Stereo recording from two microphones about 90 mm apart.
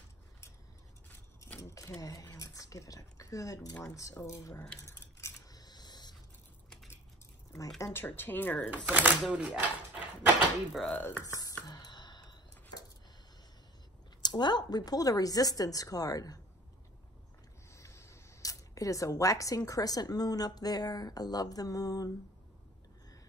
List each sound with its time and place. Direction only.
1.6 s speech: 35° left (ahead or behind)
4.8 s keys jangling: 30° left (ahead or behind)
5.5 s camera: 50° left (ahead or behind)
7.8 s speech: 25° left (ahead or behind)
8.6 s speech: 20° right (ahead or behind)
9.3 s a sound: 15° right (ahead or behind)
10.9 s speech: 20° left (ahead or behind)
11.2 s music: 35° left (ahead or behind)
11.6 s a sound: 50° left (ahead or behind)
14.2 s speech: 55° left (ahead or behind)
17.6 s speech: 35° left (ahead or behind)